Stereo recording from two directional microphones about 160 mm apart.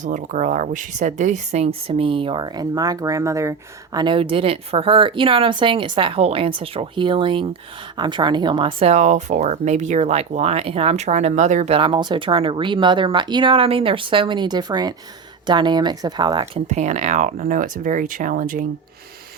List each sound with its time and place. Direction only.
0.0 s speech: 50° right (ahead or behind); by 3.5 s 20° right (ahead or behind)
3.9 s speech: 30° right (ahead or behind); by 11.8 s 45° right (ahead or behind)
11.8 s speech: 30° right (ahead or behind)
16.6 s speech: 45° right (ahead or behind)